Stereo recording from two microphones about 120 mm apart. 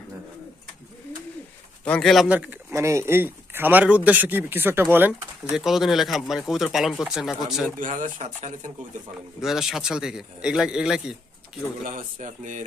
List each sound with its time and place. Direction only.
1.8 s a man's voice: 5° left (ahead or behind)
2.2 s speech: 10° right (ahead or behind)
7.8 s speech: 90° right
9.4 s a man's voice: 5° right (ahead or behind)
11.8 s speech: 85° right